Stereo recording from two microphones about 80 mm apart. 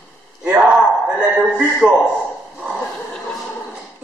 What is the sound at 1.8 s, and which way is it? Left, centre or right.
Speech, right.